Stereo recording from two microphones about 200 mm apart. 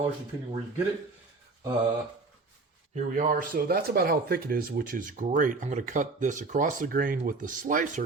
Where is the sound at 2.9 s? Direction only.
40° right (ahead or behind).